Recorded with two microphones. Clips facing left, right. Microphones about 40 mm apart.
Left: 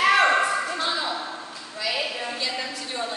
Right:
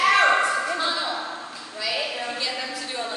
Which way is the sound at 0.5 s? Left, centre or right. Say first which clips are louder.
Right 1 dB; centre.